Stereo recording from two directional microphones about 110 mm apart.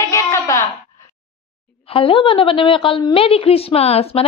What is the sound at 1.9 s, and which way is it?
A woman's voice, 55° left (ahead or behind).